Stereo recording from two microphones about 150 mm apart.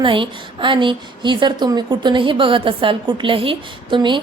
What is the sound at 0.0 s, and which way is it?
A woman's voice, 35° right (ahead or behind).